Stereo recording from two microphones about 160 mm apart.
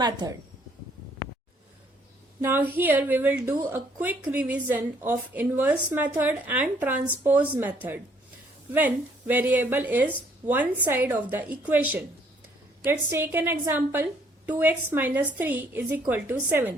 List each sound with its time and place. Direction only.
0.0 s a woman's voice: 25° right (ahead or behind)
2.4 s a woman's voice: 10° right (ahead or behind)